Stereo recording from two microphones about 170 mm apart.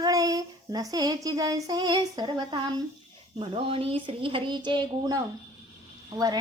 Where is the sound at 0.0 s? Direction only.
20° right (ahead or behind).